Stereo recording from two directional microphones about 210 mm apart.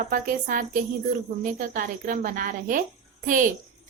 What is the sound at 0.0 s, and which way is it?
A woman's voice, 40° right (ahead or behind).